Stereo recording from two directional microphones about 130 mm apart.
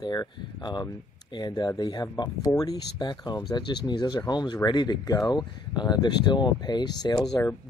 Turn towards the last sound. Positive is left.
turn(degrees=35)  # may be behind; listen again after turning